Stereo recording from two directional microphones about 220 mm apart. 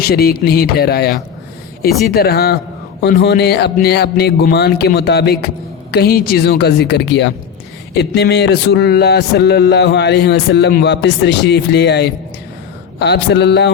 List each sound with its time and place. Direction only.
0.0 s speech: 45° left (ahead or behind)